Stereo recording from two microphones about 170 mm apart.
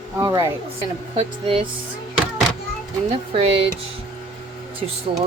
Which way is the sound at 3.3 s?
35° right (ahead or behind).